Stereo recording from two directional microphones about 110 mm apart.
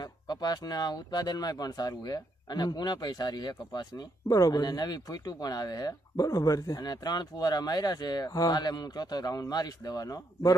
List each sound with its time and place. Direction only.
0.0 s speech: 40° left (ahead or behind)